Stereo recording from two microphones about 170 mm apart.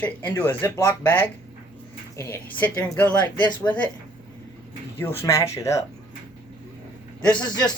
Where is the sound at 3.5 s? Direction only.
25° left (ahead or behind).